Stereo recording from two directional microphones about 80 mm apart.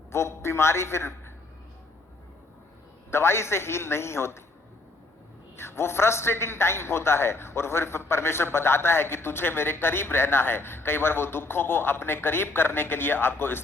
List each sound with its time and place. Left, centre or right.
0.1 s a man's voice: left
3.1 s a man's voice: left
5.5 s a man's voice: left